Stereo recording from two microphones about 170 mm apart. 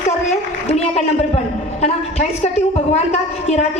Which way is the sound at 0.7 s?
40° left (ahead or behind).